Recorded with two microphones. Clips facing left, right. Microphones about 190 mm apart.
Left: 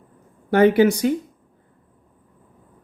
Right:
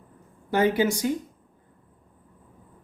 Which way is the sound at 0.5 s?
65° left (ahead or behind).